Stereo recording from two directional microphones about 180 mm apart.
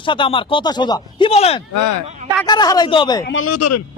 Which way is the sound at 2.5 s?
25° left (ahead or behind).